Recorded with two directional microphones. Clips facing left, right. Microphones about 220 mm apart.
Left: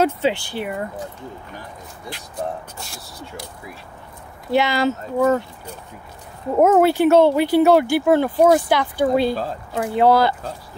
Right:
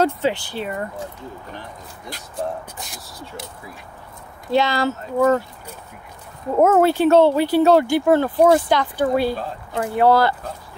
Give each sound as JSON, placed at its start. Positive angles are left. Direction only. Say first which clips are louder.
{"t": 0.2, "sound": "speech", "louder": "left 1 dB", "side_deg": 15}
{"t": 2.8, "sound": "speech", "louder": "even", "side_deg": -20}
{"t": 4.5, "sound": "speech", "louder": "left 1 dB", "side_deg": 15}
{"t": 6.5, "sound": "speech", "louder": "left 1 dB", "side_deg": 15}